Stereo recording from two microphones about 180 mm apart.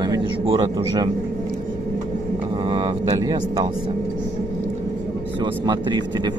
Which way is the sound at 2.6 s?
25° right (ahead or behind).